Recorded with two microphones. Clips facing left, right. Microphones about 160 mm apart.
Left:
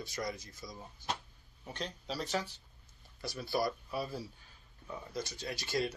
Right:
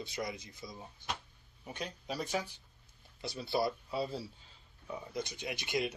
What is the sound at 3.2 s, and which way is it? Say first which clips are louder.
Speech: right 1 dB; 25° right (ahead or behind).